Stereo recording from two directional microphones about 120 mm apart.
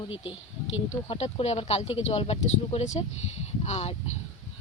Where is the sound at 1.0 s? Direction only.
55° left (ahead or behind); by 3.0 s 75° left (ahead or behind).